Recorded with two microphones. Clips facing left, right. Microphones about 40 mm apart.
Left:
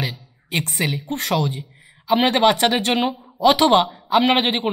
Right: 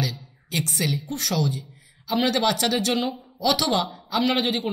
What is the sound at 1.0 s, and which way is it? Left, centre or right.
A woman's voice, left.